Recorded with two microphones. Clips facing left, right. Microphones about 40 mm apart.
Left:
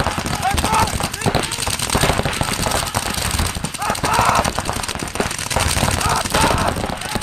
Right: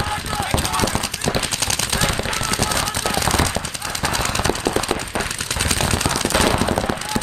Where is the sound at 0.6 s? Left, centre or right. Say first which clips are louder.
Left 4 dB; left.